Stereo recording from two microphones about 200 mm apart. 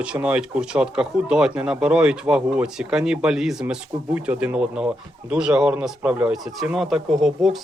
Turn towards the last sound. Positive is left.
turn(degrees=0)  # may be behind; listen again after turning